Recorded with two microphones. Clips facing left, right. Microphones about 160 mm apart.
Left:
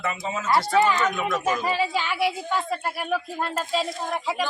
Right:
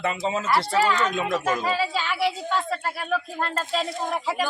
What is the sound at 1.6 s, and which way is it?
Speech, 15° left (ahead or behind).